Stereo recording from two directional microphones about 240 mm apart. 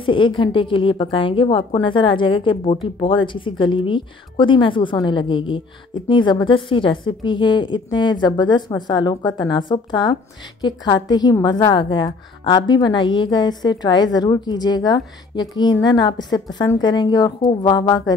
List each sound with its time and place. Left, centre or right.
0.0 s a woman's voice: left